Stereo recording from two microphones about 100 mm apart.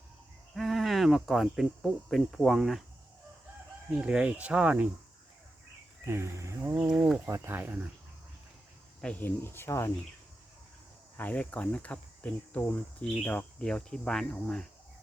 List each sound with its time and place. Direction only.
0.5 s insect: centre (ahead or behind)
2.0 s cricket: centre (ahead or behind)
3.9 s speech: 10° right (ahead or behind)
6.1 s speech: 30° right (ahead or behind)
9.0 s speech: 10° left (ahead or behind); by 9.9 s 30° left (ahead or behind)
11.2 s speech: 15° left (ahead or behind)